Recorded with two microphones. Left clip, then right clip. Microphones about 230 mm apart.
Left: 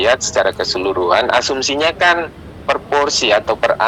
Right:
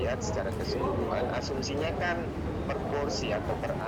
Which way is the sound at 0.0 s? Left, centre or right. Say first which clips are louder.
Left 18 dB; left.